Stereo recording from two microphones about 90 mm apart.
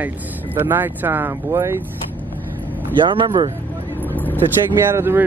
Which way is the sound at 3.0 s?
65° right (ahead or behind).